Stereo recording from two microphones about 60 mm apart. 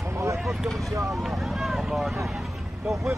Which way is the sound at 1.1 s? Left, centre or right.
Centre.